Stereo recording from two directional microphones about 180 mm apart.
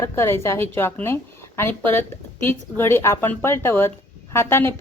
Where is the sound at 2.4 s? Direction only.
10° left (ahead or behind).